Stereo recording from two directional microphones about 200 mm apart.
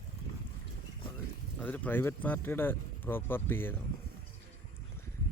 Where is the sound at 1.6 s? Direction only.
10° left (ahead or behind).